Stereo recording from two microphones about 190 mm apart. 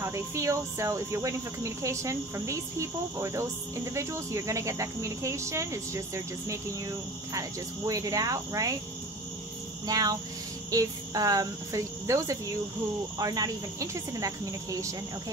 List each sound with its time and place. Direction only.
0.0 s speech: 15° right (ahead or behind)
9.8 s speech: 20° right (ahead or behind)